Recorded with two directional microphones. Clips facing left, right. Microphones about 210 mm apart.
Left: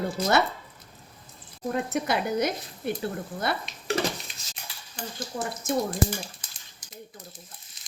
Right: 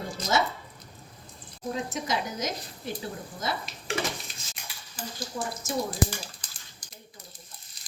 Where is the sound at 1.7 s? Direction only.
60° left (ahead or behind).